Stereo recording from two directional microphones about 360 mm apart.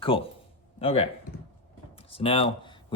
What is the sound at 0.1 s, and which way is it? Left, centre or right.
Speech, centre.